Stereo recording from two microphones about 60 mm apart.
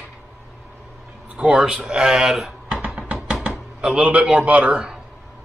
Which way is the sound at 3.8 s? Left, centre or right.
Centre.